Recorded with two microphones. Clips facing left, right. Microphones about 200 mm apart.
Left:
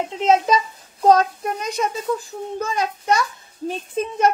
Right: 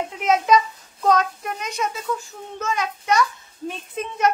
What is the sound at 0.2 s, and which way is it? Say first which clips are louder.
A child's voice: left 1 dB; 30° left (ahead or behind).